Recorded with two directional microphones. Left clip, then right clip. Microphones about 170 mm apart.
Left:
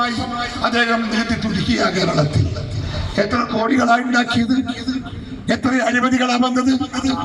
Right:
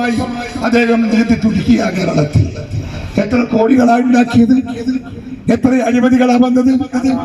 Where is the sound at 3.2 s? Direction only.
45° right (ahead or behind).